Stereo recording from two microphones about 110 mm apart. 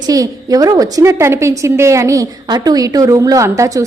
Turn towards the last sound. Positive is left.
turn(degrees=-30)  # may be behind; listen again after turning